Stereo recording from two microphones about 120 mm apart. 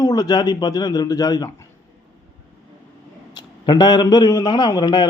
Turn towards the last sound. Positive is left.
turn(degrees=35)  # may be behind; listen again after turning